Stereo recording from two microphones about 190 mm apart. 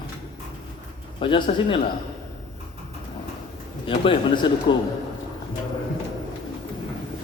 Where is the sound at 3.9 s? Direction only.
25° left (ahead or behind).